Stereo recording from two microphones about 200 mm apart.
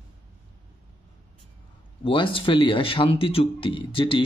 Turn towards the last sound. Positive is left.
turn(degrees=25)  # may be behind; listen again after turning